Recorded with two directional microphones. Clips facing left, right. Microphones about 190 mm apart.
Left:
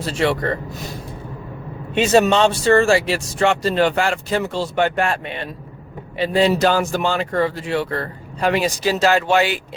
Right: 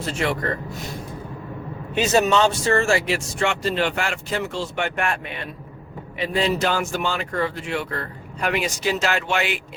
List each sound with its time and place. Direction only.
2.0 s speech: 30° left (ahead or behind)